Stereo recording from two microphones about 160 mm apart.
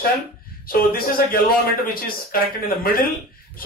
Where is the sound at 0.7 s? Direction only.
65° left (ahead or behind).